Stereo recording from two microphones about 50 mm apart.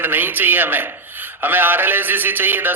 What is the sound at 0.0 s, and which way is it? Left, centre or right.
A man's voice, right.